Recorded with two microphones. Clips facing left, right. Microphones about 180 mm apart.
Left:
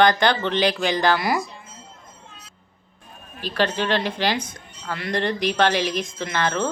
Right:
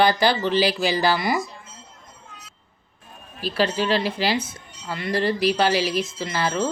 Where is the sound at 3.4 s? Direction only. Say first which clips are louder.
Right 1 dB; 10° right (ahead or behind).